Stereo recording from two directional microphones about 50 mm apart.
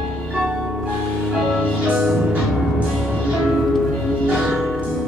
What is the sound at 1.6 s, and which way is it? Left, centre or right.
Music, right.